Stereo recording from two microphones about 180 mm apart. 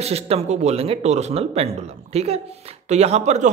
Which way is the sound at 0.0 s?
35° right (ahead or behind).